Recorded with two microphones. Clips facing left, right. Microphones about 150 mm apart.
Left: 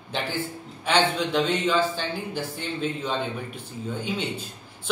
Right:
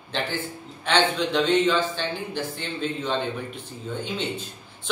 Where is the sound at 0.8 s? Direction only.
5° left (ahead or behind).